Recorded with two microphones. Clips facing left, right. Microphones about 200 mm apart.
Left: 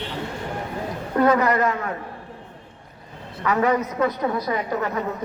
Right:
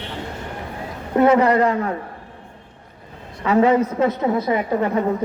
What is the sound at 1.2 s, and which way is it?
Speech, 25° right (ahead or behind).